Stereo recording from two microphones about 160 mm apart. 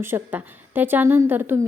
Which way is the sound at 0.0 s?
15° right (ahead or behind).